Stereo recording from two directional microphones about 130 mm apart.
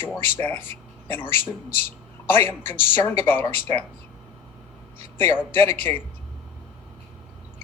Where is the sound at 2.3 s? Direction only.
15° left (ahead or behind).